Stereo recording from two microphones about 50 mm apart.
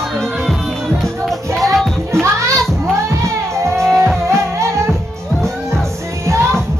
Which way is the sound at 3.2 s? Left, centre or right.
Right.